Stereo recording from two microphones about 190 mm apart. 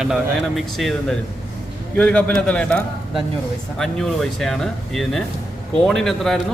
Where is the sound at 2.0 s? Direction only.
5° left (ahead or behind).